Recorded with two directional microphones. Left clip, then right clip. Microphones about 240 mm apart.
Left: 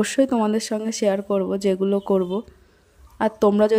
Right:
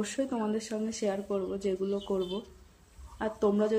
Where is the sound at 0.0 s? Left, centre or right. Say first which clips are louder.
Left 13 dB; left.